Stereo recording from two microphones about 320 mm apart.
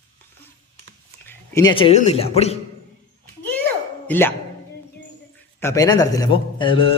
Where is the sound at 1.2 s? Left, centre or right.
Centre.